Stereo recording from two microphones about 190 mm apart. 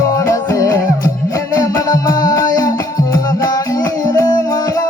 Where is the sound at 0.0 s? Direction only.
15° left (ahead or behind).